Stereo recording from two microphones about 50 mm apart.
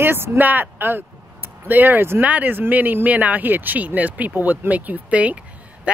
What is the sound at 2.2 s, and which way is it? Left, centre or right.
Speech, right.